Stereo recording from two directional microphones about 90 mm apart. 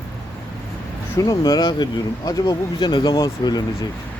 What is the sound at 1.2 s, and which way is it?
Speech, 45° left (ahead or behind).